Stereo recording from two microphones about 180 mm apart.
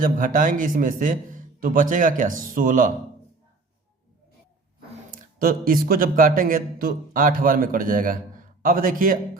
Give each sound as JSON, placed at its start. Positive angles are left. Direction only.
{"t": 0.0, "sound": "speech", "side_deg": -50}
{"t": 5.1, "sound": "speech", "side_deg": -55}